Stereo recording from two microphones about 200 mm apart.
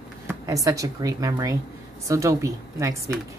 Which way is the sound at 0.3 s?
15° right (ahead or behind).